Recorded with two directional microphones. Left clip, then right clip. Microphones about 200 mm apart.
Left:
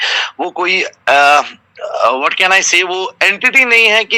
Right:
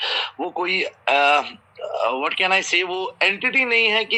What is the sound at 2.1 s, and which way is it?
A man's voice, 40° left (ahead or behind).